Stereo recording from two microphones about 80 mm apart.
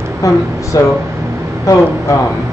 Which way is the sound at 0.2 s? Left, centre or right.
Left.